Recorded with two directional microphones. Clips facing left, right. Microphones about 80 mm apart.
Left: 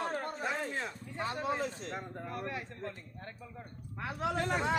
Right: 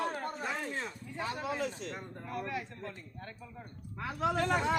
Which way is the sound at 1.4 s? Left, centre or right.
Left.